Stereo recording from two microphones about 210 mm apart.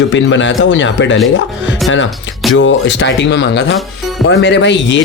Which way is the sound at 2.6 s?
60° left (ahead or behind).